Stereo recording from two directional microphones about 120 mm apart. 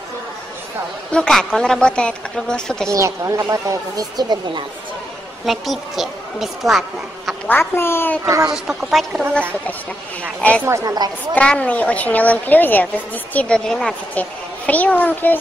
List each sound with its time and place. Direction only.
1.1 s a woman's voice: 5° left (ahead or behind)
2.9 s speech: 25° right (ahead or behind)
5.4 s a woman's voice: centre (ahead or behind)
7.4 s a woman's voice: 20° left (ahead or behind)
8.3 s speech: 30° right (ahead or behind)
8.6 s a woman's voice: centre (ahead or behind)
10.6 s speech: 25° right (ahead or behind)
11.3 s a woman's voice: 10° left (ahead or behind)